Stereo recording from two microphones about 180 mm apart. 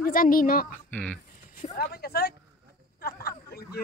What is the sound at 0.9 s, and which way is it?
Speech, 5° left (ahead or behind).